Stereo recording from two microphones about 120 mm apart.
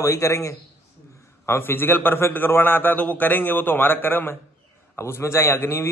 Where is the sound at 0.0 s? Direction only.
25° left (ahead or behind).